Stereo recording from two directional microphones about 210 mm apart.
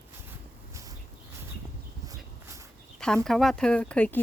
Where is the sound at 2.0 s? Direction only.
15° right (ahead or behind).